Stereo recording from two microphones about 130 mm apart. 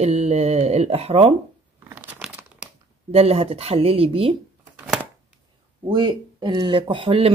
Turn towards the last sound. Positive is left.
turn(degrees=-45)  # may be behind; listen again after turning